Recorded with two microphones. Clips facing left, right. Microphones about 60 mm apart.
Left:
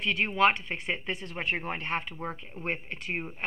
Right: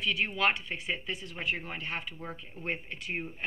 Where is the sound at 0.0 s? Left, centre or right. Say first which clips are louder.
Left 4 dB; left.